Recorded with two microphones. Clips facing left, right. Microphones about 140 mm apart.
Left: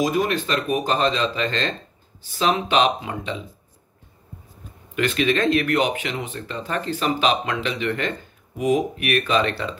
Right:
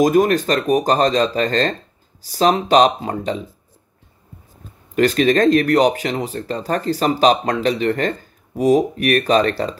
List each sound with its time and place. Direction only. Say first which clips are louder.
0.0 s speech: right 7 dB; 45° right (ahead or behind)
4.9 s speech: right 6 dB; 40° right (ahead or behind)